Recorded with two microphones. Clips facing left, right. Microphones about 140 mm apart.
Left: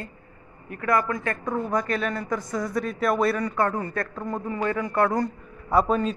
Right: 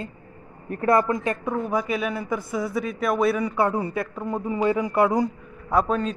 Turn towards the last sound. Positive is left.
turn(degrees=5)  # may be behind; listen again after turning